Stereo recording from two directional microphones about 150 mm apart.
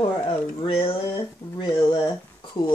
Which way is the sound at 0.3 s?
35° left (ahead or behind).